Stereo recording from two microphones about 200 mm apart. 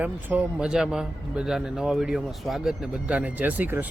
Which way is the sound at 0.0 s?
10° right (ahead or behind).